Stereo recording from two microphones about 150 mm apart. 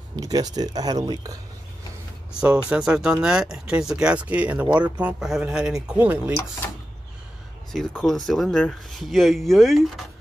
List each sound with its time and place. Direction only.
0.1 s speech: 25° right (ahead or behind)
2.7 s speech: 5° right (ahead or behind)
7.7 s speech: 5° left (ahead or behind)